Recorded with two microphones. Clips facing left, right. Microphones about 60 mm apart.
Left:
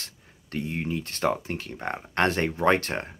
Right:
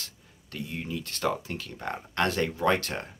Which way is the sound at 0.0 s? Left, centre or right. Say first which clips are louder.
Left 1 dB; left.